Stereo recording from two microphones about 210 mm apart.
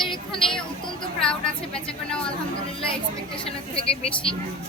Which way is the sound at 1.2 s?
5° left (ahead or behind).